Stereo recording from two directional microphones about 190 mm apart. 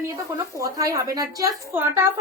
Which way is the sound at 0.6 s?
15° right (ahead or behind).